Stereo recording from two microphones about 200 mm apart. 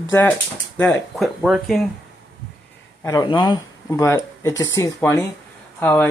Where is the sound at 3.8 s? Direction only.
15° left (ahead or behind).